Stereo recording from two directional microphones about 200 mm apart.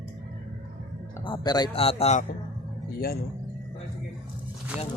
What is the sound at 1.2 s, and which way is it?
Speech, 20° left (ahead or behind).